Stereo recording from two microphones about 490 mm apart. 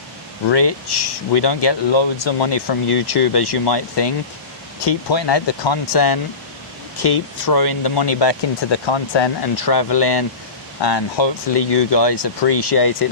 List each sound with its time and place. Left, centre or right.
0.4 s speech: left